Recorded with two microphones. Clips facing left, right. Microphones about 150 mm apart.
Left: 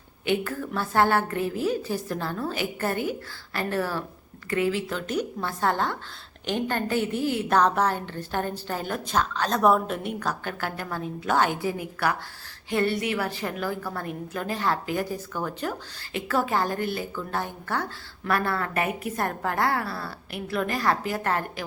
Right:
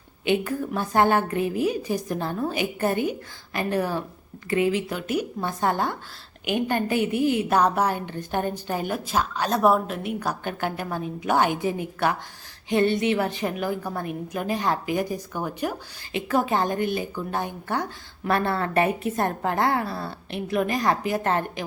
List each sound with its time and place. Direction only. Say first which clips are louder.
0.3 s a woman's voice: right 3 dB; 15° right (ahead or behind)
10.2 s a woman's voice: right 2 dB; 20° right (ahead or behind)